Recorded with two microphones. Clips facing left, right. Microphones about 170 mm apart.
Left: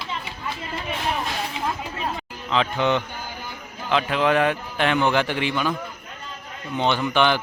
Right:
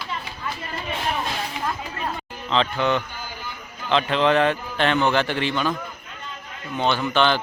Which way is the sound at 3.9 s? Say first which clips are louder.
Right 1 dB; 5° left (ahead or behind).